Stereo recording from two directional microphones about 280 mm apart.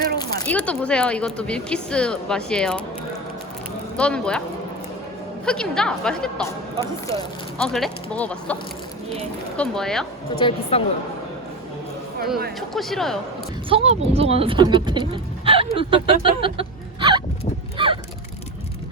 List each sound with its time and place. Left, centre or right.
0.3 s speech: centre
3.9 s speech: centre
5.5 s speech: centre
9.6 s speech: centre
10.3 s a woman's voice: centre
12.5 s speech: centre
13.7 s speech: right